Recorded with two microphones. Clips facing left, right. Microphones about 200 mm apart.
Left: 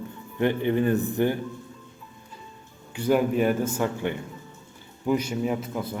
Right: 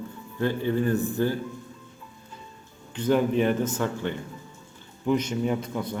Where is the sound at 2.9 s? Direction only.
10° left (ahead or behind).